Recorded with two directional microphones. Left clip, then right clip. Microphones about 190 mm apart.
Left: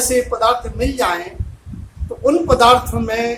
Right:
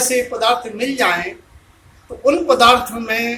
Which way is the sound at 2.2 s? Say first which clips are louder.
Even; 25° left (ahead or behind).